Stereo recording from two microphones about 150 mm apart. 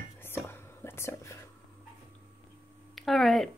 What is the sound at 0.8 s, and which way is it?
Whispering, 15° left (ahead or behind).